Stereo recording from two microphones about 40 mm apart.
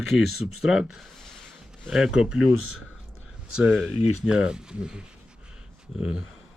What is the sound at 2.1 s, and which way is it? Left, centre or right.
Speech, centre.